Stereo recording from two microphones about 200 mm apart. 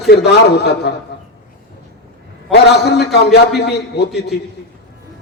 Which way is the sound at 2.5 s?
55° left (ahead or behind).